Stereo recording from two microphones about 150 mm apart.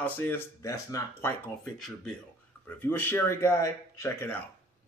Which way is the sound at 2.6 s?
15° left (ahead or behind).